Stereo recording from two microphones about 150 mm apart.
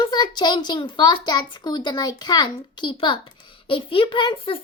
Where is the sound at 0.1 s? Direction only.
30° left (ahead or behind).